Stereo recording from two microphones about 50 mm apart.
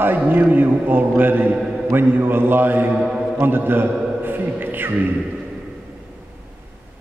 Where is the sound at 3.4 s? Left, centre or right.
Right.